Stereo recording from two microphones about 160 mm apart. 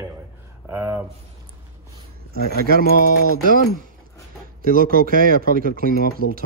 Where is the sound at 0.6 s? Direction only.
15° right (ahead or behind).